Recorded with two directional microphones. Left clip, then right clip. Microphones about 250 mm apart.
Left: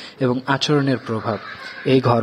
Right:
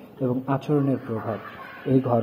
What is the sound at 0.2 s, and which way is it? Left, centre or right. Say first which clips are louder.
Speech: left 7 dB; left.